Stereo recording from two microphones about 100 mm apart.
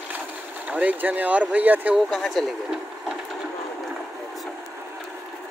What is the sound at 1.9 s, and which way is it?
Speech, 5° left (ahead or behind).